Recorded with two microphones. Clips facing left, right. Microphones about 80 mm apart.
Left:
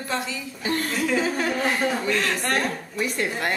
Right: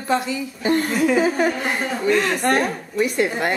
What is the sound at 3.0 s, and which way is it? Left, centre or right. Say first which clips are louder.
Speech: right 6 dB; centre.